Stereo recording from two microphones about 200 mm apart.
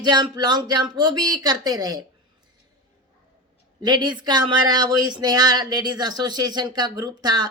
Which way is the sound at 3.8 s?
20° right (ahead or behind).